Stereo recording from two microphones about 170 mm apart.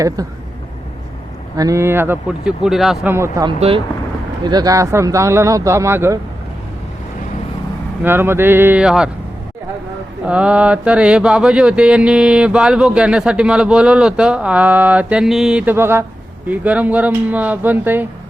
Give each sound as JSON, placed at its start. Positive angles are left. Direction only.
{"t": 0.2, "sound": "speech", "side_deg": -20}
{"t": 1.5, "sound": "speech", "side_deg": -20}
{"t": 2.6, "sound": "mantra", "side_deg": 0}
{"t": 3.1, "sound": "speech", "side_deg": -15}
{"t": 8.0, "sound": "speech", "side_deg": -15}
{"t": 10.2, "sound": "mantra", "side_deg": -5}
{"t": 16.5, "sound": "speech", "side_deg": -10}